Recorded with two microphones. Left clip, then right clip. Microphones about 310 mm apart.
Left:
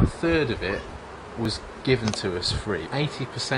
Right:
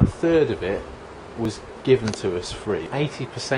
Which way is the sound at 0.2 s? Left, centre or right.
Centre.